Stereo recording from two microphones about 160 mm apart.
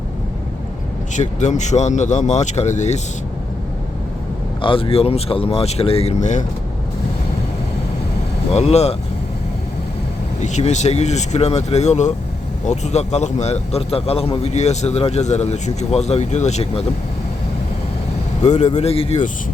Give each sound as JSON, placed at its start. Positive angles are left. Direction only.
{"t": 1.1, "sound": "a man's voice", "side_deg": 50}
{"t": 4.6, "sound": "speech", "side_deg": 35}
{"t": 8.5, "sound": "speech", "side_deg": 40}
{"t": 10.4, "sound": "a man's voice", "side_deg": 45}
{"t": 18.4, "sound": "a man's voice", "side_deg": 45}